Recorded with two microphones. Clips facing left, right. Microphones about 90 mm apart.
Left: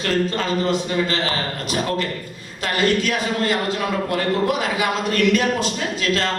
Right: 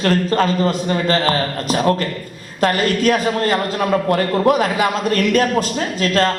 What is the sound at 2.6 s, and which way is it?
A man's voice, 45° right (ahead or behind).